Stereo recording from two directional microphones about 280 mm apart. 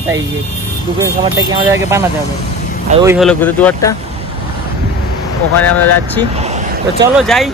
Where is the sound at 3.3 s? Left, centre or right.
Centre.